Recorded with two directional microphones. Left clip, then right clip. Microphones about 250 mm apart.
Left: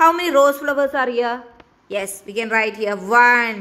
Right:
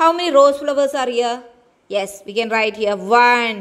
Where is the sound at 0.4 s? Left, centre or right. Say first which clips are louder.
Right 4 dB; centre.